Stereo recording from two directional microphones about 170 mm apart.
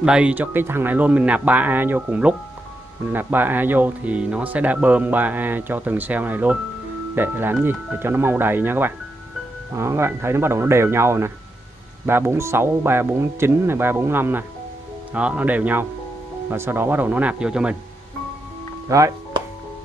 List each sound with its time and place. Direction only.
0.0 s speech: 5° right (ahead or behind)
18.9 s music: 20° right (ahead or behind)